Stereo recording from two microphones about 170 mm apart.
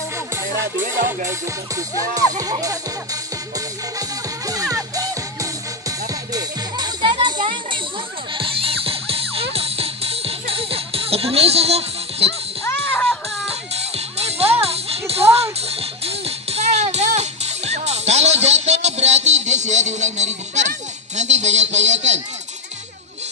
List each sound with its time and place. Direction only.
1.8 s music: 20° right (ahead or behind); by 12.4 s 35° right (ahead or behind)
12.6 s a sound: 10° left (ahead or behind)
13.5 s music: 40° right (ahead or behind)
14.6 s children playing: 35° right (ahead or behind)
15.6 s music: 35° right (ahead or behind)
21.2 s a sound: 45° right (ahead or behind)